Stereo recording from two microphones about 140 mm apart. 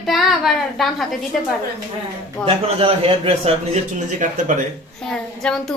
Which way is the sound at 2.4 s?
40° right (ahead or behind).